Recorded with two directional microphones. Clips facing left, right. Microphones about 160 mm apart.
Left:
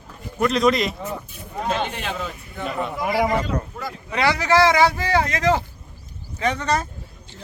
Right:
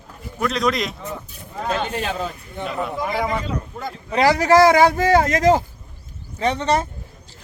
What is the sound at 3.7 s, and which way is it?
A man's voice, 30° right (ahead or behind).